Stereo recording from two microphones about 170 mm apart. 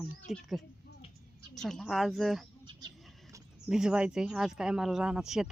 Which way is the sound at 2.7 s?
25° right (ahead or behind).